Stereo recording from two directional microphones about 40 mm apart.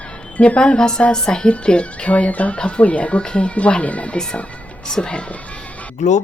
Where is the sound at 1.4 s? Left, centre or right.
Left.